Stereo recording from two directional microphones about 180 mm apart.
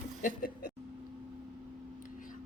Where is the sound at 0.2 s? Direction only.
50° left (ahead or behind).